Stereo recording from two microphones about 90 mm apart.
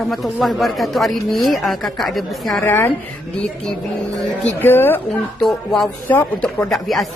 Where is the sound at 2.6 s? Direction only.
20° left (ahead or behind).